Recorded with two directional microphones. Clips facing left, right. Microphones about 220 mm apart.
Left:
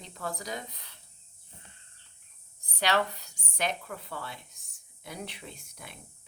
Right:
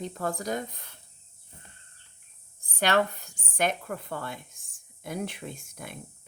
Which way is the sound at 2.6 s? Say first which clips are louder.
Right 3 dB; 50° right (ahead or behind).